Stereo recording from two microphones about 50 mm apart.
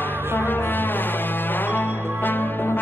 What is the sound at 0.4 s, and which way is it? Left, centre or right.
Music, left.